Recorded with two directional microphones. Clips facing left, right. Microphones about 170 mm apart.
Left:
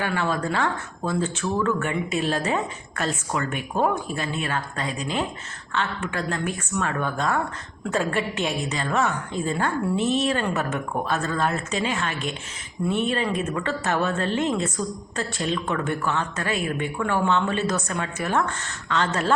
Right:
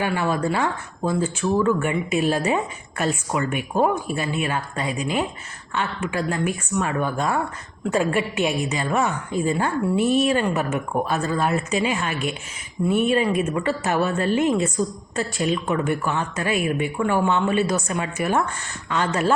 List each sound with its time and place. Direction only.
0.0 s a woman's voice: 10° right (ahead or behind)